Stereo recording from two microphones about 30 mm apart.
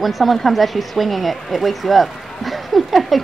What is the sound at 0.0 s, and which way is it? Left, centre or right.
Speech, centre.